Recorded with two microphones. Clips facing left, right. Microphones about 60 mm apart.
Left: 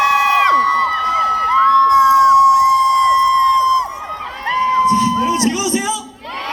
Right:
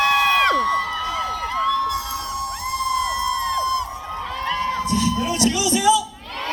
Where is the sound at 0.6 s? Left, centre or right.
Left.